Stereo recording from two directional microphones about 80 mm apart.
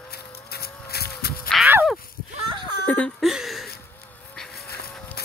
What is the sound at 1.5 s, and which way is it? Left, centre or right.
Whip, centre.